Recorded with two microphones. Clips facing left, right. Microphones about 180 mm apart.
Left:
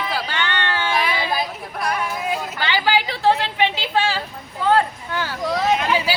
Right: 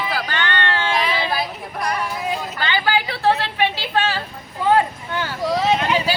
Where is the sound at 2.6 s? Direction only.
15° left (ahead or behind).